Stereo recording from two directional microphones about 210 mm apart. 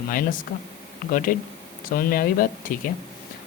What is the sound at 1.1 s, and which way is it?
A woman's voice, 40° left (ahead or behind).